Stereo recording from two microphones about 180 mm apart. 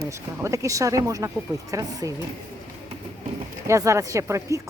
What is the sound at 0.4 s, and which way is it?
Speech, 15° right (ahead or behind).